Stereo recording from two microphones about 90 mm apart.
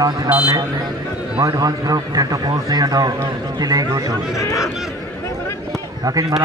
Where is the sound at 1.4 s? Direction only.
45° right (ahead or behind).